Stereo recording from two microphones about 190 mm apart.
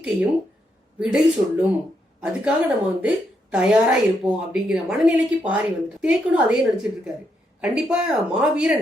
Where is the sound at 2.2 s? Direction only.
5° right (ahead or behind).